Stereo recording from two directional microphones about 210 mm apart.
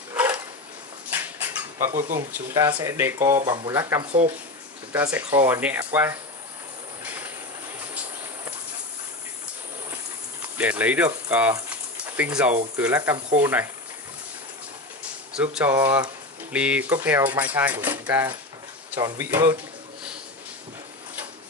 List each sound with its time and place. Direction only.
0.1 s a sound: 10° right (ahead or behind)
1.1 s rodents: 10° right (ahead or behind)
2.1 s speech: 15° right (ahead or behind)
4.0 s speech: 30° right (ahead or behind)
4.9 s speech: 10° right (ahead or behind)
7.1 s train: 10° right (ahead or behind)
10.6 s speech: 5° right (ahead or behind)
15.3 s speech: 5° right (ahead or behind)